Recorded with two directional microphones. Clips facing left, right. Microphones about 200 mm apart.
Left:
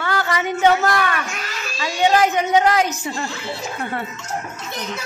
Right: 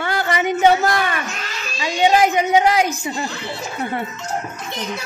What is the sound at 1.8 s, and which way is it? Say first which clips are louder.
A woman's voice: right 1 dB; 15° right (ahead or behind).